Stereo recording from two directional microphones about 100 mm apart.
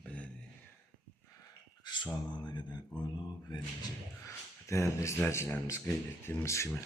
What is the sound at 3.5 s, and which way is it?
Speech, 45° left (ahead or behind).